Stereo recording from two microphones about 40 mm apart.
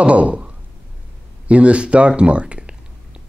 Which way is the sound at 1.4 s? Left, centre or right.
Right.